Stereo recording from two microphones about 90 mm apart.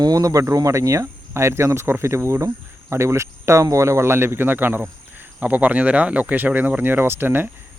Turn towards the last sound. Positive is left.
turn(degrees=-25)  # may be behind; listen again after turning